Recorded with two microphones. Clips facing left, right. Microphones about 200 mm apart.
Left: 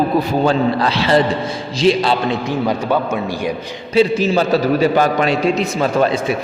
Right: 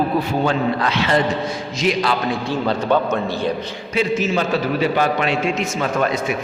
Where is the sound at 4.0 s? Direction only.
35° left (ahead or behind).